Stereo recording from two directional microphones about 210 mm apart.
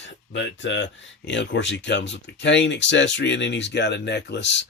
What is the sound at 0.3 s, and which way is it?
Speech, 60° left (ahead or behind).